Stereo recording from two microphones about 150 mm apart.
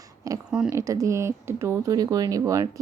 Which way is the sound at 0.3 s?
25° right (ahead or behind).